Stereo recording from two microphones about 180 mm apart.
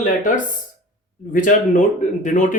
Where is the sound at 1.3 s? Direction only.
45° left (ahead or behind).